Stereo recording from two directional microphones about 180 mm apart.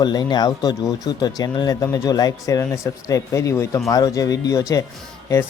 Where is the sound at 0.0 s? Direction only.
25° left (ahead or behind).